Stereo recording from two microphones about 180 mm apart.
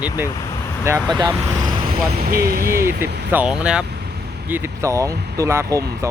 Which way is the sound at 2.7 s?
15° right (ahead or behind).